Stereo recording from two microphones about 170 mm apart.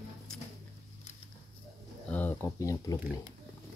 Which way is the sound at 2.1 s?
10° left (ahead or behind).